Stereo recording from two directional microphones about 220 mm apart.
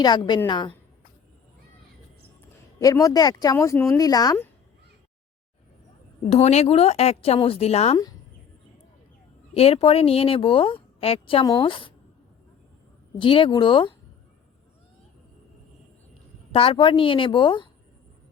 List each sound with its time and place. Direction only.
0.0 s speech: 20° left (ahead or behind)
2.7 s speech: 15° left (ahead or behind)
6.2 s speech: 30° left (ahead or behind)
9.6 s speech: 25° left (ahead or behind)
13.1 s speech: 25° left (ahead or behind)
16.5 s speech: 25° left (ahead or behind)